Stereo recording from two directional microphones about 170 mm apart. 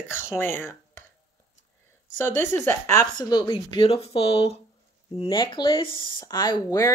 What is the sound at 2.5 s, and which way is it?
Speech, 15° left (ahead or behind).